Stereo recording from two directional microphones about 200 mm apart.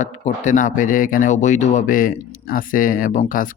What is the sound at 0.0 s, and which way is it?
Speech, 40° left (ahead or behind).